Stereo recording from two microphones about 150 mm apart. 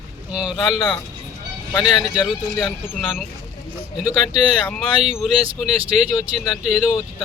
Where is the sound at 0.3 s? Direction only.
5° right (ahead or behind).